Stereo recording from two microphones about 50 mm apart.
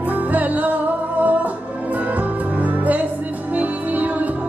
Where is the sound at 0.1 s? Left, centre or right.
Right.